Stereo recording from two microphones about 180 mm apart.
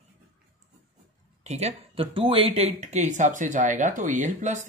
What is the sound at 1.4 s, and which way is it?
Speech, 35° right (ahead or behind).